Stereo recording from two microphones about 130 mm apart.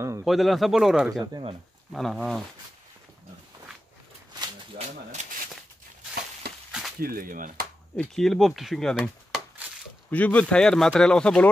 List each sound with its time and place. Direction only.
0.2 s speech: centre (ahead or behind)
4.7 s speech: 60° right (ahead or behind)
7.0 s speech: 90° right
7.9 s speech: 5° left (ahead or behind)
10.1 s speech: 10° left (ahead or behind)